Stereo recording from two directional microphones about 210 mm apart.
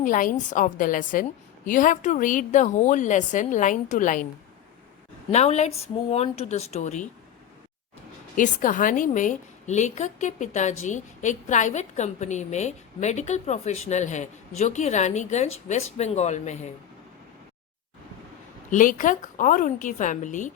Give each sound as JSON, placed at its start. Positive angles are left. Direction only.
{"t": 0.0, "sound": "a woman's voice", "side_deg": 40}
{"t": 5.3, "sound": "a woman's voice", "side_deg": 30}
{"t": 8.4, "sound": "a woman's voice", "side_deg": 40}
{"t": 18.7, "sound": "a woman's voice", "side_deg": 40}